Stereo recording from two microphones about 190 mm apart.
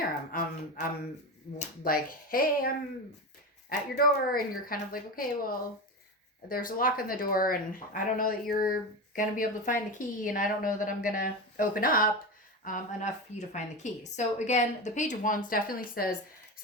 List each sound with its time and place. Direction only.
0.3 s a woman's voice: 50° left (ahead or behind)